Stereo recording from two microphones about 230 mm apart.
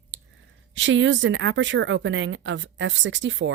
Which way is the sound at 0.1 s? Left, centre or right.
Right.